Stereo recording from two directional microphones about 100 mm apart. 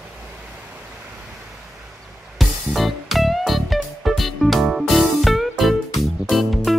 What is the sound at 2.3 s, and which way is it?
Music, centre (ahead or behind).